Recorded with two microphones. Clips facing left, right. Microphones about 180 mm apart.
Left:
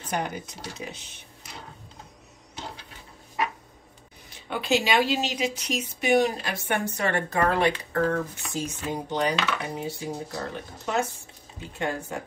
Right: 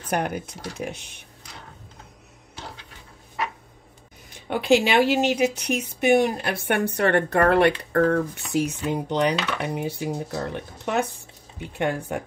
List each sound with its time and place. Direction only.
0.1 s a woman's voice: 55° right (ahead or behind)
4.5 s a woman's voice: 55° right (ahead or behind)